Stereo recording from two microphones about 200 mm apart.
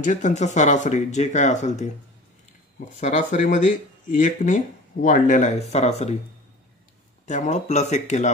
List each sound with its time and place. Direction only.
0.0 s speech: 35° left (ahead or behind)
3.0 s speech: 40° left (ahead or behind)
7.2 s speech: 35° left (ahead or behind)